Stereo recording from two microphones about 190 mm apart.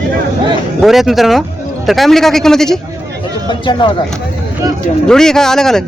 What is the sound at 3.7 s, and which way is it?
Speech, 25° left (ahead or behind).